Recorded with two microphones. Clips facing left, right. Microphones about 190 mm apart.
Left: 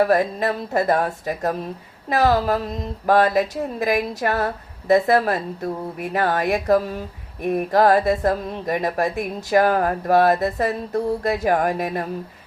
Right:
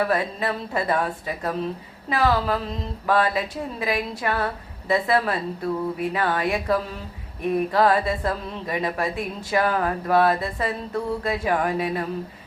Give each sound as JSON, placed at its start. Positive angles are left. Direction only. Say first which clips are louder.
{"t": 0.0, "sound": "a woman's voice", "louder": "left 5 dB", "side_deg": 45}